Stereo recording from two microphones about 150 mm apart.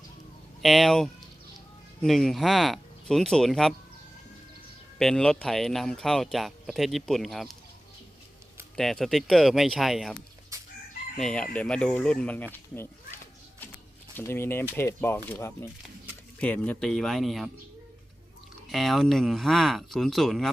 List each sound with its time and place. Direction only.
0.6 s speech: centre (ahead or behind)
4.9 s speech: 5° left (ahead or behind)
8.7 s speech: 5° left (ahead or behind)
11.2 s speech: 5° left (ahead or behind)
14.2 s speech: 15° left (ahead or behind)
18.7 s speech: centre (ahead or behind)